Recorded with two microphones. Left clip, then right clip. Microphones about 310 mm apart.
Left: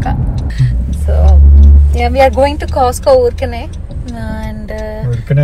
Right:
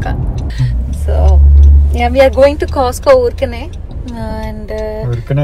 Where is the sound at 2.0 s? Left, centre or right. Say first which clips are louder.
Right 1 dB; centre.